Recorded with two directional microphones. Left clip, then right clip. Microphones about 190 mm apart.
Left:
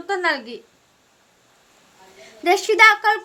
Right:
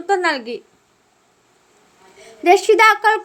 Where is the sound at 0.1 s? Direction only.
20° right (ahead or behind).